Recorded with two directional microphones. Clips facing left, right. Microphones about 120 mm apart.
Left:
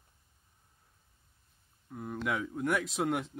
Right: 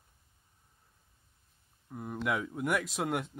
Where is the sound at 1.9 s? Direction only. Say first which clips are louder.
Right 1 dB; 5° right (ahead or behind).